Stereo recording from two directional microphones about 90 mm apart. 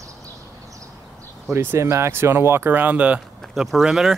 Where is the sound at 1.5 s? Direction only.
30° right (ahead or behind).